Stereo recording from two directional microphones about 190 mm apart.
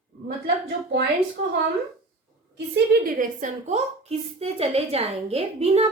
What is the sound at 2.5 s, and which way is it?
A woman's voice, 60° right (ahead or behind).